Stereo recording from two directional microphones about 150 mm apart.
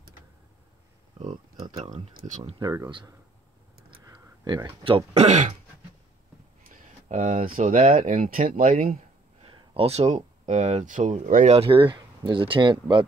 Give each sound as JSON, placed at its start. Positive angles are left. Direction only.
{"t": 1.3, "sound": "a sound", "side_deg": -40}
{"t": 2.6, "sound": "speech", "side_deg": -20}
{"t": 4.0, "sound": "a sound", "side_deg": -20}
{"t": 4.8, "sound": "speech", "side_deg": -40}
{"t": 7.1, "sound": "speech", "side_deg": -55}
{"t": 9.4, "sound": "speech", "side_deg": -35}
{"t": 11.5, "sound": "speech", "side_deg": -35}